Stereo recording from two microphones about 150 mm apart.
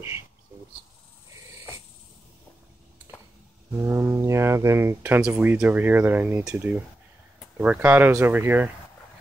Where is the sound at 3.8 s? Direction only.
15° right (ahead or behind).